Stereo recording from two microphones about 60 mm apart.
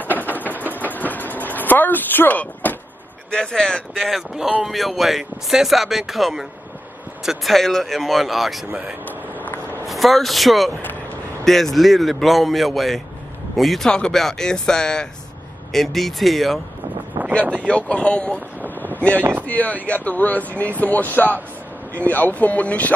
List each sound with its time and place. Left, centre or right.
0.0 s a sound: left
0.8 s vehicle: left
3.3 s speech: centre
4.0 s speech: centre
9.0 s vehicle: left
9.8 s speech: centre
17.6 s speech: centre
18.6 s vehicle: right
19.1 s speech: right
19.4 s speech: left